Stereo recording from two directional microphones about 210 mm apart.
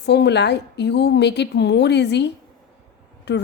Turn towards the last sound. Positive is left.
turn(degrees=55)  # may be behind; listen again after turning